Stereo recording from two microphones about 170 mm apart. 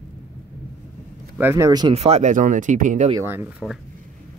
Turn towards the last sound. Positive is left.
turn(degrees=-15)  # may be behind; listen again after turning